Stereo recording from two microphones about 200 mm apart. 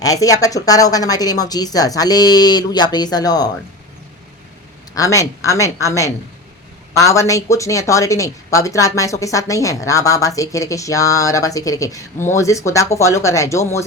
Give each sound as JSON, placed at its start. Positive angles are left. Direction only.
{"t": 0.0, "sound": "speech", "side_deg": 15}
{"t": 4.9, "sound": "speech", "side_deg": 15}